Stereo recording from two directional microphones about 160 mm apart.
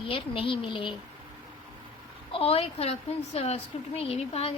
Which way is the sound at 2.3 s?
40° left (ahead or behind).